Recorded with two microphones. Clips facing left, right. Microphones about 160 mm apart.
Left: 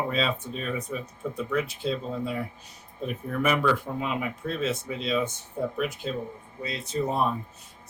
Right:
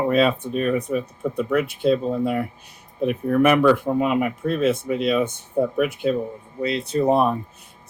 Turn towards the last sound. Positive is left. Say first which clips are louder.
# right 8 dB
turn(degrees=-65)  # may be behind; listen again after turning